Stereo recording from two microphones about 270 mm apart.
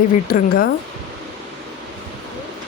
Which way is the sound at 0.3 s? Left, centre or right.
Left.